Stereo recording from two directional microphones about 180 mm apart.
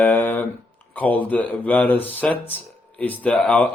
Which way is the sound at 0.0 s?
10° left (ahead or behind).